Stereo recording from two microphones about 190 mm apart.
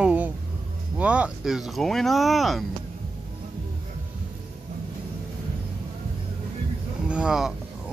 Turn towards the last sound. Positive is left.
turn(degrees=-5)  # may be behind; listen again after turning